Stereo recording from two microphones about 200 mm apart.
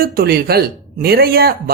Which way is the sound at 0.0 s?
50° right (ahead or behind).